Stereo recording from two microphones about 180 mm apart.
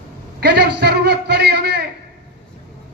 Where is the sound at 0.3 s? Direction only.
65° right (ahead or behind).